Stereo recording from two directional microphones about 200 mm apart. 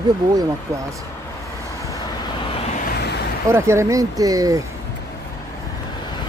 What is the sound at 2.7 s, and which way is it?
Vehicle, 50° left (ahead or behind).